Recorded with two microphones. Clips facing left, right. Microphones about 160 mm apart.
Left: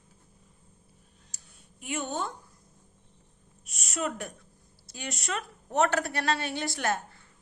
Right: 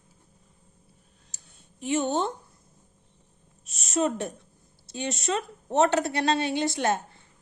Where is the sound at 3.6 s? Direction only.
25° right (ahead or behind).